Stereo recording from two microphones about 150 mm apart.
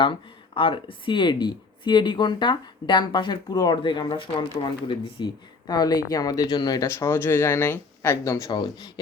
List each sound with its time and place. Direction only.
0.0 s speech: 35° left (ahead or behind)